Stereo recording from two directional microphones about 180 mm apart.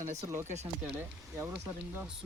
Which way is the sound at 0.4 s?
40° right (ahead or behind).